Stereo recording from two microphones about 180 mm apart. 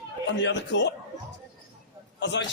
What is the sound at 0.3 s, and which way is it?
Speech, 80° left.